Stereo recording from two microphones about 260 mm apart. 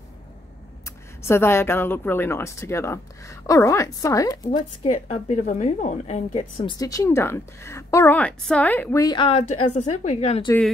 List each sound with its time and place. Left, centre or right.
1.2 s speech: centre
4.5 s a woman's voice: left
6.8 s a woman's voice: centre